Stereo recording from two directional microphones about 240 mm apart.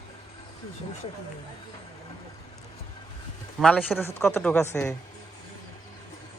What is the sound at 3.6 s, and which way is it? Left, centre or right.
A man's voice, centre.